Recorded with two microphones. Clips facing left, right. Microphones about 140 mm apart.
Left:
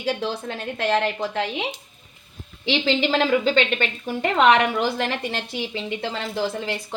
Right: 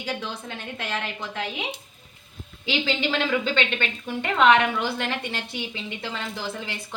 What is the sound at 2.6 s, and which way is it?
A woman's voice, 35° left (ahead or behind).